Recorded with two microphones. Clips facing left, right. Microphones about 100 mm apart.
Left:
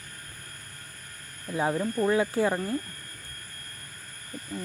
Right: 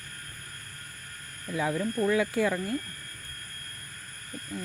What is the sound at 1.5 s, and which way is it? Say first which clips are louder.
Speech: left 2 dB; 35° left (ahead or behind).